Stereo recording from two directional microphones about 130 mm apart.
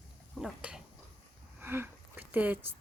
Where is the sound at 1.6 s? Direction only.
15° right (ahead or behind).